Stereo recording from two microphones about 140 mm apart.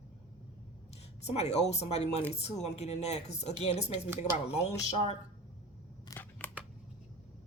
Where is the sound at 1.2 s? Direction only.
50° left (ahead or behind).